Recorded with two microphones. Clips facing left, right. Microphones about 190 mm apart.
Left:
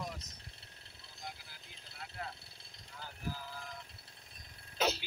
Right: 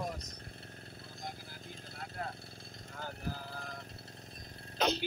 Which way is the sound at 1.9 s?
45° right (ahead or behind).